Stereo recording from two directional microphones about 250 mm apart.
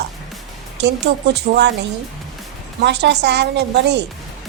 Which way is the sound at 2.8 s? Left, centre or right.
Right.